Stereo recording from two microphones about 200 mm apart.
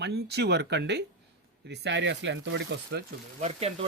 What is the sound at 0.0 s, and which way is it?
Speech, 55° right (ahead or behind).